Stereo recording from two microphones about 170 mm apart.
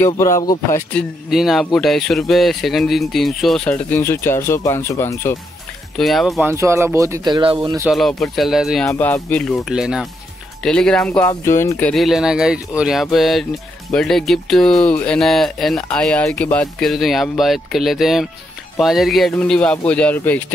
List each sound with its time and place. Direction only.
0.0 s speech: 15° left (ahead or behind)
1.3 s speech: centre (ahead or behind); by 5.4 s 15° left (ahead or behind)
5.9 s speech: centre (ahead or behind)
6.4 s speech: 15° right (ahead or behind)
7.9 s speech: centre (ahead or behind)
8.9 s speech: 10° left (ahead or behind)
9.7 s speech: 5° right (ahead or behind); by 11.9 s 15° left (ahead or behind)
11.9 s speech: centre (ahead or behind)